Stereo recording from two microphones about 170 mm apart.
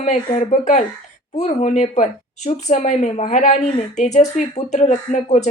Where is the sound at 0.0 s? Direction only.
45° left (ahead or behind).